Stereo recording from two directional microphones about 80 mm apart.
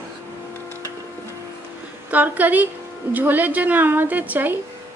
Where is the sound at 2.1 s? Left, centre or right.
Right.